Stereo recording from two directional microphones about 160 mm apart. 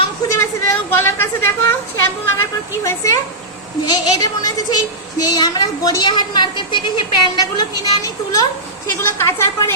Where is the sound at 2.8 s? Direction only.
20° left (ahead or behind).